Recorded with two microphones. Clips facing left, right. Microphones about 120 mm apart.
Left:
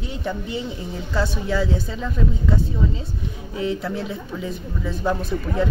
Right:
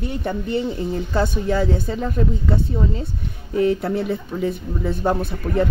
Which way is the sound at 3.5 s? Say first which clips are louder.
Right 7 dB; 55° right (ahead or behind).